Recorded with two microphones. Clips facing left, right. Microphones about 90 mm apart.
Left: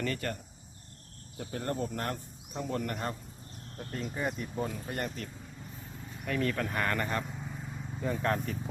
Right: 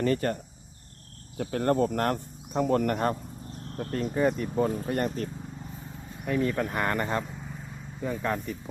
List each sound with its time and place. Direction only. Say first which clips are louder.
0.0 s speech: right 8 dB; 35° right (ahead or behind)
1.4 s speech: right 10 dB; 65° right (ahead or behind)
4.2 s speech: right 9 dB; 40° right (ahead or behind)
6.2 s speech: right 5 dB; 15° right (ahead or behind)
8.0 s speech: right 1 dB; 5° right (ahead or behind)